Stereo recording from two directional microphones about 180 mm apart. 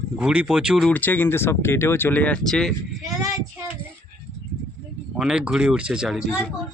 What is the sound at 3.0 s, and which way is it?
Child singing, 20° right (ahead or behind).